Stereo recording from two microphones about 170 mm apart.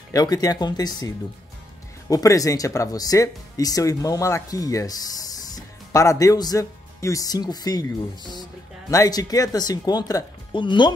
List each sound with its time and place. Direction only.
0.1 s speech: 20° left (ahead or behind)
8.9 s speech: 20° left (ahead or behind)